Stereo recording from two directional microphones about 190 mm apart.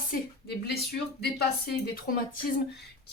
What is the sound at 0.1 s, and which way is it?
Speech, 55° left (ahead or behind).